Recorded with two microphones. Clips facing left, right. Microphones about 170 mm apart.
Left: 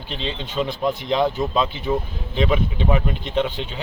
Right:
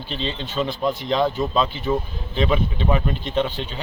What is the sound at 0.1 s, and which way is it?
Speech, 15° left (ahead or behind).